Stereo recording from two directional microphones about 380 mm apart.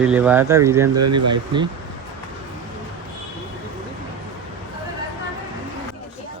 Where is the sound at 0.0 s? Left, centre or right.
Centre.